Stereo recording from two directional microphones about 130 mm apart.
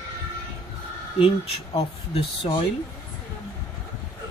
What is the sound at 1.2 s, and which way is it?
Speech, 50° left (ahead or behind).